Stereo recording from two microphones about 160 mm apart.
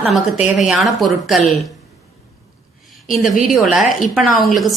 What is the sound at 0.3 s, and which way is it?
Speech, 45° left (ahead or behind).